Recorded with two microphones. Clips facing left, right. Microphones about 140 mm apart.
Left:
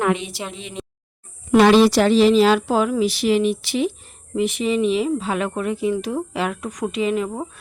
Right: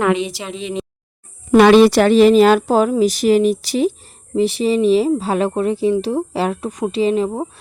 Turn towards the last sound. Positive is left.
turn(degrees=-30)  # may be behind; listen again after turning